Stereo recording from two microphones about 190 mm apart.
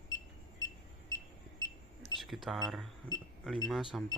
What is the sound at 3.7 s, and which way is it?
Speech, centre (ahead or behind).